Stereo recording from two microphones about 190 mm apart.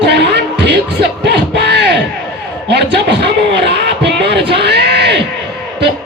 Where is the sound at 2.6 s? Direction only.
65° right (ahead or behind).